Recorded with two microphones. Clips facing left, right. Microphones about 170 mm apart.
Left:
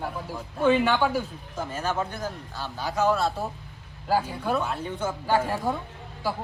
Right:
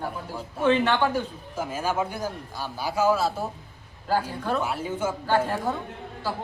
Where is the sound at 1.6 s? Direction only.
10° right (ahead or behind).